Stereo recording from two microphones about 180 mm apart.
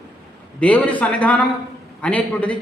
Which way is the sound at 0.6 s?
5° left (ahead or behind).